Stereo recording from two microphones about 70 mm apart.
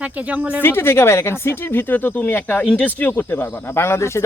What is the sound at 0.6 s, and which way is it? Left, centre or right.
Speech, left.